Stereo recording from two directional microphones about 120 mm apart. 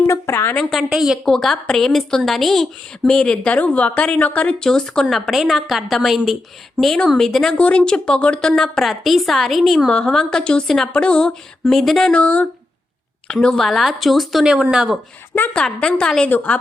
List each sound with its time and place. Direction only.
0.1 s a woman's voice: 20° left (ahead or behind)
0.5 s a woman's voice: centre (ahead or behind)
15.4 s a woman's voice: 10° left (ahead or behind)